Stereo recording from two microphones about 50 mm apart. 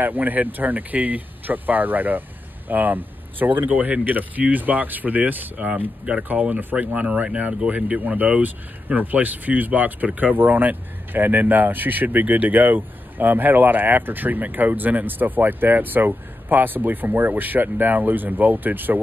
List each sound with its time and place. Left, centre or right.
0.0 s speech: right